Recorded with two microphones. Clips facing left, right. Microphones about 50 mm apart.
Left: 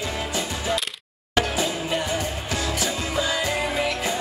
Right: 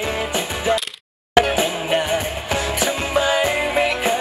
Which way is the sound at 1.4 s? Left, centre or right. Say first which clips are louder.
Right 6 dB; right.